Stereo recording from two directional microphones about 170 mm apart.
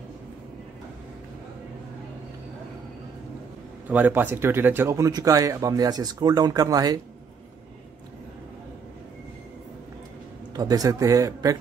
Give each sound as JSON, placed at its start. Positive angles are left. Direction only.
{"t": 3.9, "sound": "speech", "side_deg": -10}
{"t": 10.5, "sound": "speech", "side_deg": -20}